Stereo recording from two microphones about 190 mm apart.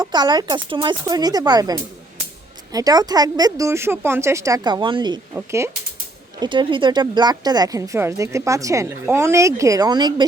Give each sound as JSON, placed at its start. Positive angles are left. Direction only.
{"t": 0.0, "sound": "speech", "side_deg": -20}
{"t": 5.3, "sound": "speech", "side_deg": -15}
{"t": 6.4, "sound": "speech", "side_deg": -25}